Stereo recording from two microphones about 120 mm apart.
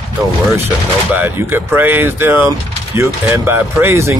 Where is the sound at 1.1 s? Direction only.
15° right (ahead or behind).